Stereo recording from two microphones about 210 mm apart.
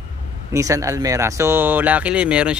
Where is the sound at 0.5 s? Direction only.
15° right (ahead or behind).